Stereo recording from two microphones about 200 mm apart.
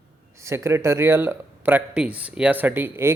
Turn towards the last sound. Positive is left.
turn(degrees=-10)  # may be behind; listen again after turning